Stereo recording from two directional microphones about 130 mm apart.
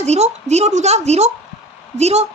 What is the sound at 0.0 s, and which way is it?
A woman's voice, 55° right (ahead or behind).